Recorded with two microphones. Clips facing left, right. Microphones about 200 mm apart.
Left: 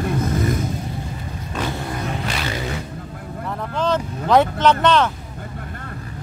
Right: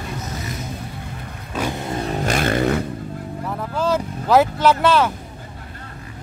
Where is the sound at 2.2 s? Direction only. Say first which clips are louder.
Right 7 dB; 50° right (ahead or behind).